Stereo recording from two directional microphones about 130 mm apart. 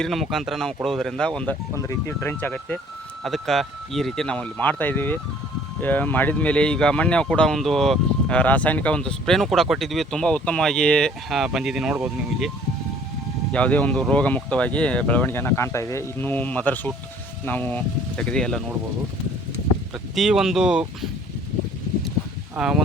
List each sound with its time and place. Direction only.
0.0 s speech: centre (ahead or behind)
1.8 s speech: 20° left (ahead or behind); by 12.5 s 5° right (ahead or behind)
13.5 s speech: 10° left (ahead or behind)
20.1 s speech: 5° right (ahead or behind)
22.5 s speech: 5° right (ahead or behind)